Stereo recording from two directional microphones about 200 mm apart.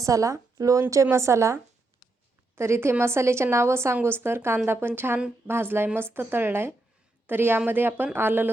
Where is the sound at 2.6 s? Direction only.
15° right (ahead or behind).